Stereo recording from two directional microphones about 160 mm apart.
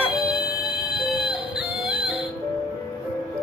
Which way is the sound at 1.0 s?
5° right (ahead or behind).